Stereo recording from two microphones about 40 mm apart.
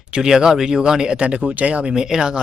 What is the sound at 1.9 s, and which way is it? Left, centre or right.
Speech, centre.